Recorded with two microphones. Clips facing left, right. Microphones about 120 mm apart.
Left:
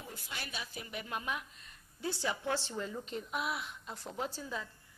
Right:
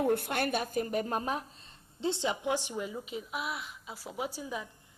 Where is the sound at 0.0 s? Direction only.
60° right (ahead or behind); by 4.7 s 15° right (ahead or behind).